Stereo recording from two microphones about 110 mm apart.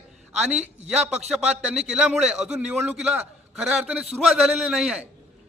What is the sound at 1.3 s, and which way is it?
A man's voice, 10° right (ahead or behind).